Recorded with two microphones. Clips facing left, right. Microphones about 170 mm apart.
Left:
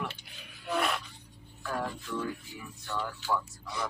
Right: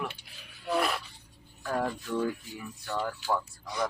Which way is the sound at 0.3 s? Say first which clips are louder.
Right 3 dB; centre (ahead or behind).